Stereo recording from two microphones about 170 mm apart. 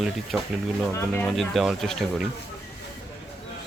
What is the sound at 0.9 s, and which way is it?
Speech, 10° left (ahead or behind).